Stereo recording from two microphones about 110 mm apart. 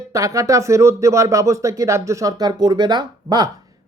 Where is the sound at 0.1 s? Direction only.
30° right (ahead or behind).